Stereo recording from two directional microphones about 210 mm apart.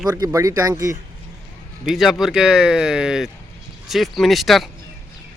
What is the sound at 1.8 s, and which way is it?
Speech, centre (ahead or behind).